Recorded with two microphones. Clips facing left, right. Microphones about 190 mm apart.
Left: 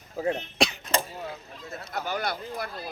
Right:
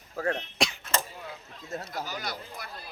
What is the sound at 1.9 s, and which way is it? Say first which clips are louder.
Speech: left 5 dB; 55° left (ahead or behind).